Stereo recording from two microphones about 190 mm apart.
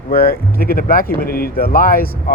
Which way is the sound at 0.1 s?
50° left (ahead or behind).